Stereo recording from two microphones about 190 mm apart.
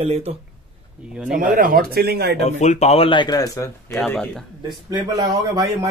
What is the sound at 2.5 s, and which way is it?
Speech, 35° left (ahead or behind).